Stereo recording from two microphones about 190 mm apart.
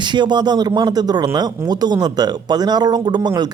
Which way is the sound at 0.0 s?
25° right (ahead or behind).